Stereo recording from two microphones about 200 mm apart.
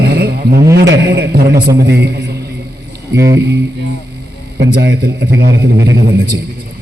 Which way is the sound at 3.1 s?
15° right (ahead or behind).